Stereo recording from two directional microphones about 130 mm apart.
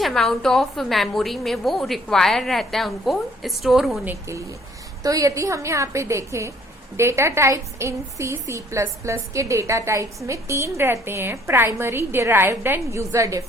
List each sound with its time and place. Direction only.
0.0 s a woman's voice: centre (ahead or behind)
4.0 s a woman's voice: 20° right (ahead or behind)